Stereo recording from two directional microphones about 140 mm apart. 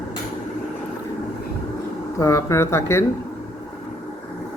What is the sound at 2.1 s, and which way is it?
Speech, 20° left (ahead or behind).